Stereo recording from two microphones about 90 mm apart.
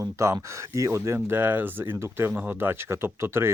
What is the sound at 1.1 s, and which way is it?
Speech, 20° right (ahead or behind).